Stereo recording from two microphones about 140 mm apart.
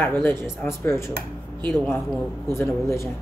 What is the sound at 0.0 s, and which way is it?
Speech, 15° left (ahead or behind).